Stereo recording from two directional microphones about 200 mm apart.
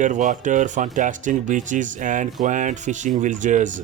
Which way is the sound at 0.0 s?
40° right (ahead or behind).